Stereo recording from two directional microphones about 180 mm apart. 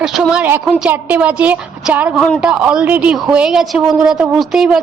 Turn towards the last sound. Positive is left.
turn(degrees=0)  # may be behind; listen again after turning